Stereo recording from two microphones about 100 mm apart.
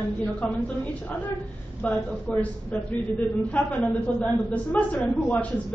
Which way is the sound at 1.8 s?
15° left (ahead or behind).